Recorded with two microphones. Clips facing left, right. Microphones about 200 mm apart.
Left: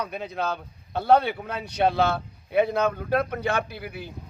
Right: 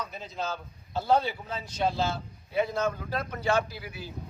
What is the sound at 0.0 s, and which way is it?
A man's voice, 60° left (ahead or behind).